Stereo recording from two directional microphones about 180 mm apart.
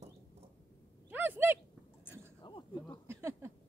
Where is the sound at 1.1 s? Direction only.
10° right (ahead or behind).